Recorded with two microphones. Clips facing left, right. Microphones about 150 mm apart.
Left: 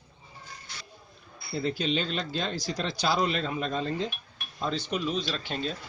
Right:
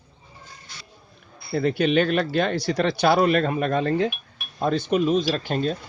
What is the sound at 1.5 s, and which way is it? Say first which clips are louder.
Speech: right 8 dB; 65° right (ahead or behind).